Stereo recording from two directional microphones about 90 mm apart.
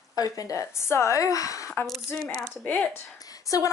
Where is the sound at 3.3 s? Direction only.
40° left (ahead or behind).